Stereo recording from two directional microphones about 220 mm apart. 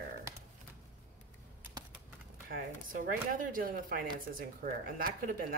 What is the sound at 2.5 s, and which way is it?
Speech, 40° right (ahead or behind).